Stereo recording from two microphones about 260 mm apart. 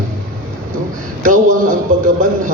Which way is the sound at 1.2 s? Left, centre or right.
Right.